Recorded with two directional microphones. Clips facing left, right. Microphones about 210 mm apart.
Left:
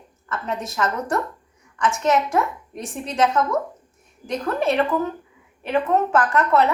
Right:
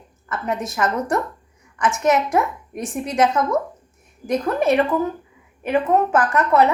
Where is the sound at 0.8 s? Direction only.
10° right (ahead or behind).